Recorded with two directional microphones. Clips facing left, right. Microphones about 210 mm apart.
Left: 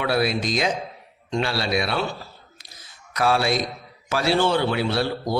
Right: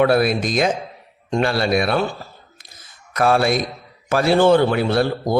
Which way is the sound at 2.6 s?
50° right (ahead or behind).